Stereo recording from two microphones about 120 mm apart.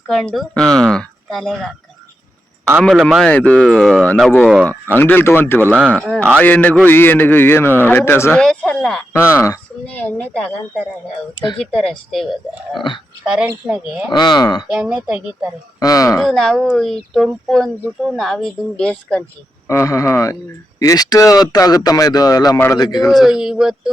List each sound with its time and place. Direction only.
0.1 s speech: 5° left (ahead or behind)
2.8 s speech: 5° left (ahead or behind)
4.9 s speech: 15° left (ahead or behind)
8.4 s speech: 5° left (ahead or behind)
9.3 s speech: 25° left (ahead or behind)
9.8 s speech: 15° left (ahead or behind)
11.5 s speech: 5° left (ahead or behind); by 14.1 s 10° right (ahead or behind)
14.1 s speech: 35° left (ahead or behind)
14.7 s speech: 5° right (ahead or behind)
15.8 s speech: 30° left (ahead or behind)
16.2 s speech: 5° left (ahead or behind)
19.6 s speech: 25° left (ahead or behind)
23.1 s speech: 5° right (ahead or behind)